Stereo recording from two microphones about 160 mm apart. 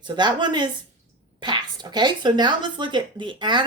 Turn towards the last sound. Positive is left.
turn(degrees=-30)  # may be behind; listen again after turning